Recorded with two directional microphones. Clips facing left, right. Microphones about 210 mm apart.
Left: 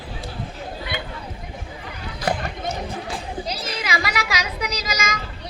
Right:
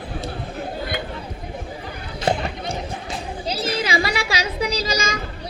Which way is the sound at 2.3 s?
30° right (ahead or behind).